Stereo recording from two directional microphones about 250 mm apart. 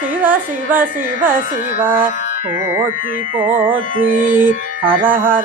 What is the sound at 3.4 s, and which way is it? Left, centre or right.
Speech, centre.